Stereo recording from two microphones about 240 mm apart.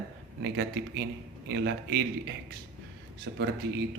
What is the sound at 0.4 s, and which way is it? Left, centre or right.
Speech, right.